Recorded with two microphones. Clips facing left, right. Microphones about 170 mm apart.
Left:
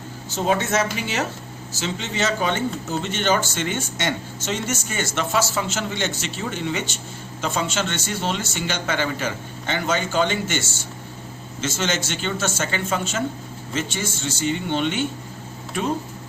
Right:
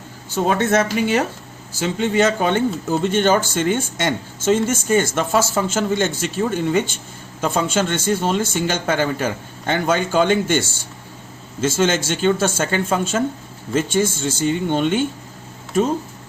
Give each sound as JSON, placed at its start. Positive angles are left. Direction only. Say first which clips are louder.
{"t": 0.3, "sound": "speech", "louder": "right 4 dB", "side_deg": -50}
{"t": 11.8, "sound": "speech", "louder": "right 8 dB", "side_deg": -50}